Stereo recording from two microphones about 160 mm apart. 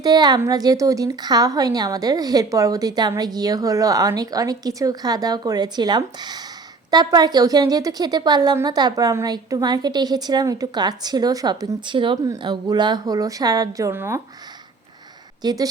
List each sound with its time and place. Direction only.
0.0 s a woman's voice: 25° right (ahead or behind)
15.4 s speech: 25° right (ahead or behind)